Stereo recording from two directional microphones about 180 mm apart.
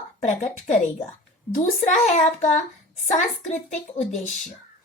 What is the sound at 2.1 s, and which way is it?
A woman's voice, 45° left (ahead or behind).